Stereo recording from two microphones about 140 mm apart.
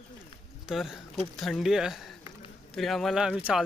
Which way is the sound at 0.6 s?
5° right (ahead or behind).